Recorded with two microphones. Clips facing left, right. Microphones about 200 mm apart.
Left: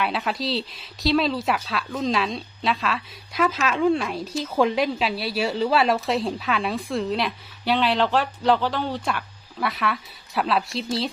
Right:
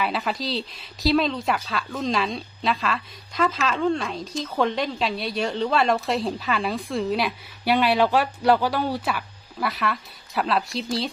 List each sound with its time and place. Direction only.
0.0 s speech: centre (ahead or behind)